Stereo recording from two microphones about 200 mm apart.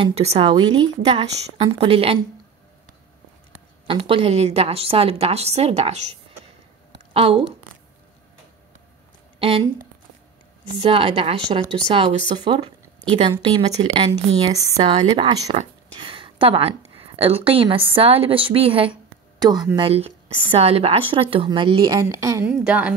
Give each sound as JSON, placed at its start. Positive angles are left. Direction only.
{"t": 0.0, "sound": "a woman's voice", "side_deg": -30}
{"t": 3.8, "sound": "a woman's voice", "side_deg": -25}
{"t": 7.2, "sound": "a woman's voice", "side_deg": -25}
{"t": 9.4, "sound": "speech", "side_deg": -30}
{"t": 10.7, "sound": "a woman's voice", "side_deg": -25}